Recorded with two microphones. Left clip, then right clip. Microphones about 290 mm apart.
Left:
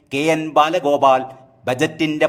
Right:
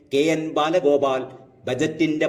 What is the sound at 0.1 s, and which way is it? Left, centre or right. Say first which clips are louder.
A man's voice: left 3 dB; left.